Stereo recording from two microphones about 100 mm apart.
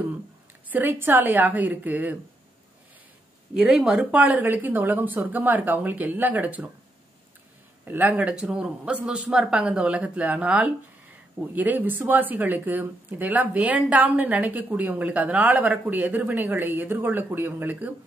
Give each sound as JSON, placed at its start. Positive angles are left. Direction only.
{"t": 0.7, "sound": "speech", "side_deg": -20}
{"t": 3.5, "sound": "speech", "side_deg": -5}
{"t": 4.0, "sound": "speech", "side_deg": -15}
{"t": 7.8, "sound": "speech", "side_deg": -20}